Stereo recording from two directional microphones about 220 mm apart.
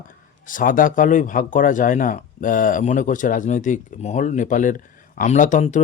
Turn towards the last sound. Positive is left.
turn(degrees=35)  # may be behind; listen again after turning